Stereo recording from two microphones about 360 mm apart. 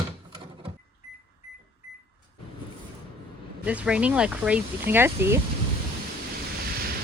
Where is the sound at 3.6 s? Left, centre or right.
Centre.